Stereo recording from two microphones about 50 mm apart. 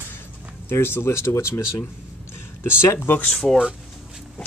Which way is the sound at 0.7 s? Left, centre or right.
Left.